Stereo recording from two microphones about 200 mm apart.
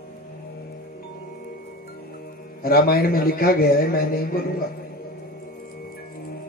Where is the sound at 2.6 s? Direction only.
50° left (ahead or behind).